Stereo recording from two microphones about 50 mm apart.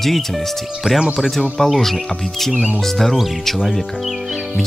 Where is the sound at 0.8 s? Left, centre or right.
Centre.